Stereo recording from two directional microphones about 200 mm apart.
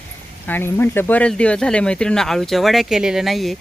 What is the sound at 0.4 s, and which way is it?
Speech, 10° left (ahead or behind).